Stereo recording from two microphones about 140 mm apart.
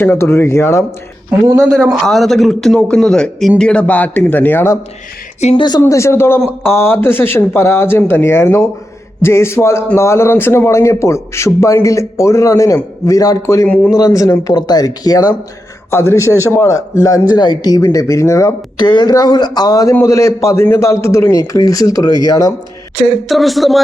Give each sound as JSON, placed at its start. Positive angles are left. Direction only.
{"t": 0.0, "sound": "speech", "side_deg": 15}
{"t": 1.5, "sound": "a man's voice", "side_deg": -5}
{"t": 5.5, "sound": "speech", "side_deg": 30}
{"t": 5.8, "sound": "a man's voice", "side_deg": 20}
{"t": 18.9, "sound": "a man's voice", "side_deg": 30}
{"t": 23.3, "sound": "a man's voice", "side_deg": 0}